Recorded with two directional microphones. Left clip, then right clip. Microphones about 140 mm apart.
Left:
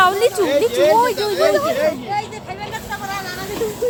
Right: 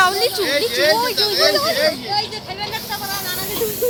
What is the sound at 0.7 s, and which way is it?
Speech, 90° left.